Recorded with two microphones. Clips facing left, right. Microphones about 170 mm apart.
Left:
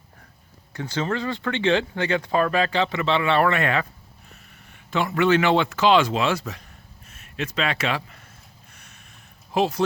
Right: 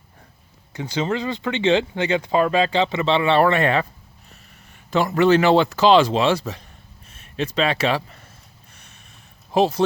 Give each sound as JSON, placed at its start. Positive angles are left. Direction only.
{"t": 0.7, "sound": "speech", "side_deg": -15}
{"t": 4.9, "sound": "speech", "side_deg": -40}
{"t": 9.5, "sound": "speech", "side_deg": -25}